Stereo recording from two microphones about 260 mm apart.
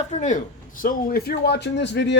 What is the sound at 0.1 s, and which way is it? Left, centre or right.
Speech, left.